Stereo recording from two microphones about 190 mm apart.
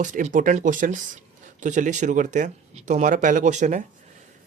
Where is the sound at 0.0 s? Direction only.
40° right (ahead or behind).